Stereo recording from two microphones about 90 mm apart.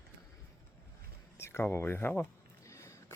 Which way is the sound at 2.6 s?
35° left (ahead or behind).